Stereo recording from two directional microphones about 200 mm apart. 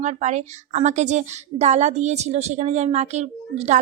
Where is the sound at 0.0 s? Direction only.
35° right (ahead or behind).